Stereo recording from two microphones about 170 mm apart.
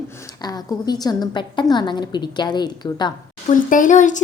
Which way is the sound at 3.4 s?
50° left (ahead or behind).